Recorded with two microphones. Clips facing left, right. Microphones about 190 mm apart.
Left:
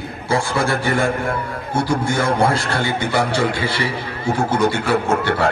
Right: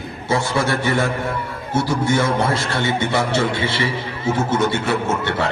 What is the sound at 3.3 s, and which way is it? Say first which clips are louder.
Speech: even; 25° right (ahead or behind).